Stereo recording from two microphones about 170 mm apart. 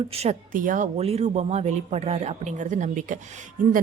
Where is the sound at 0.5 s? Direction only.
50° right (ahead or behind).